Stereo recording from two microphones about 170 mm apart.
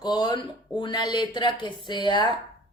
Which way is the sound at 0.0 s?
25° left (ahead or behind).